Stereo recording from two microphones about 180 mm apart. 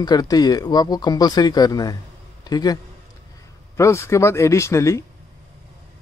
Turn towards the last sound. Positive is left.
turn(degrees=15)  # may be behind; listen again after turning